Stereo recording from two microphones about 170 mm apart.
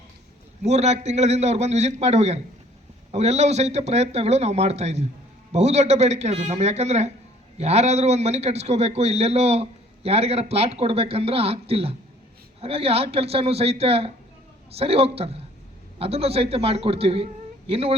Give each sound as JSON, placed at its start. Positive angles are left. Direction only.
{"t": 0.6, "sound": "a man's voice", "side_deg": -40}